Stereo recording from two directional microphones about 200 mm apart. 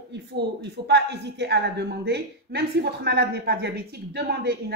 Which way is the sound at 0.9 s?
55° right (ahead or behind).